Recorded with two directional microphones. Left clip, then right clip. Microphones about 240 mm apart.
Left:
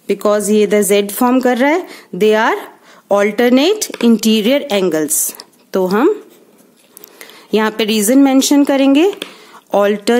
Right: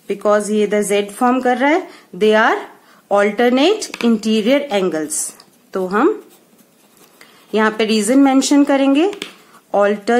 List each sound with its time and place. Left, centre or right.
0.0 s speech: left
7.2 s speech: left